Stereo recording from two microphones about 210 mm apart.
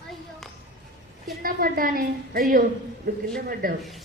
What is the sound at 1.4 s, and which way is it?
A woman's voice, 40° right (ahead or behind).